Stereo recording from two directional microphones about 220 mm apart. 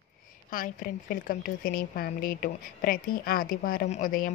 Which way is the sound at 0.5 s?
40° left (ahead or behind).